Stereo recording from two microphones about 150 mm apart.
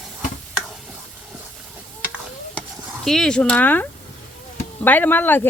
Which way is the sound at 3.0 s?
5° left (ahead or behind).